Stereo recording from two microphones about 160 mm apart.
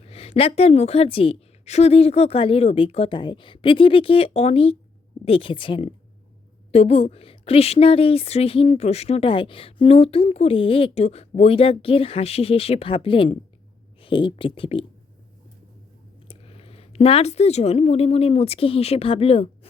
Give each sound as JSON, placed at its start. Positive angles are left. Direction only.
{"t": 0.0, "sound": "a woman's voice", "side_deg": 40}
{"t": 16.3, "sound": "speech", "side_deg": 35}